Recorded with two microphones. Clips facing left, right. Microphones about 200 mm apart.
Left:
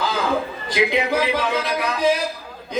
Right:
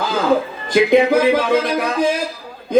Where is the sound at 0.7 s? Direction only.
50° right (ahead or behind).